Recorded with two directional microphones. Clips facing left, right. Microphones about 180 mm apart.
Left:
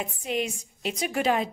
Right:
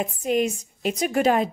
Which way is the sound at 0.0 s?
45° right (ahead or behind).